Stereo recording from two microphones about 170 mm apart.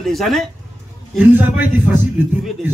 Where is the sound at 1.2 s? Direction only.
10° right (ahead or behind).